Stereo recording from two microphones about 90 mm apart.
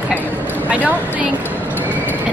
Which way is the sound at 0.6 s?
15° right (ahead or behind).